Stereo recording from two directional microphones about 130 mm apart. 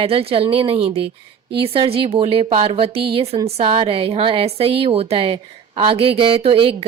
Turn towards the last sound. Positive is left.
turn(degrees=-45)  # may be behind; listen again after turning